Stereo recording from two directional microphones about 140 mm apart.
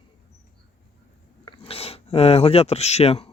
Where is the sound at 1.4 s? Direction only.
40° left (ahead or behind).